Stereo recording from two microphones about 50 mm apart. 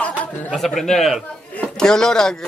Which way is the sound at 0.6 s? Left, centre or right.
Centre.